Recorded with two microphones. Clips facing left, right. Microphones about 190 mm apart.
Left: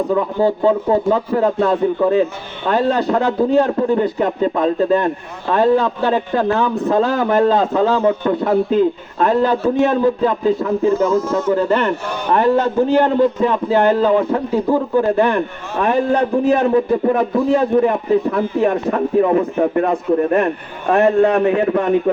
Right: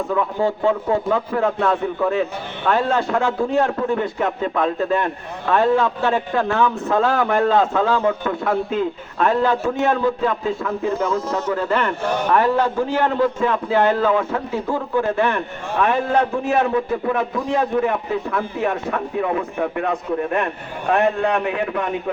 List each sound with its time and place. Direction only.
0.1 s a man's voice: 35° left (ahead or behind)